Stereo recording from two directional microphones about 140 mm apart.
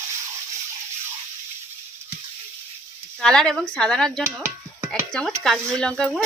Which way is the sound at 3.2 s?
5° left (ahead or behind).